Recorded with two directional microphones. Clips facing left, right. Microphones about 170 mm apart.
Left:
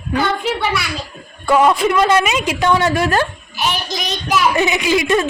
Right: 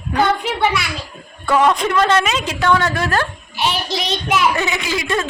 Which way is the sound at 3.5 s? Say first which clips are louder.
Right 1 dB; 30° right (ahead or behind).